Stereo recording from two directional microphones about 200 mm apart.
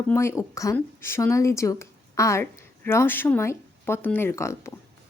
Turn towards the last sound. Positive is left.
turn(degrees=15)  # may be behind; listen again after turning